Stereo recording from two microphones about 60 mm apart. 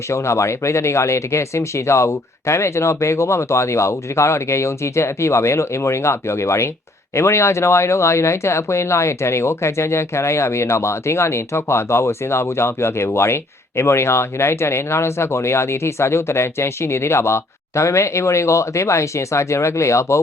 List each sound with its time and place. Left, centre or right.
0.1 s speech: left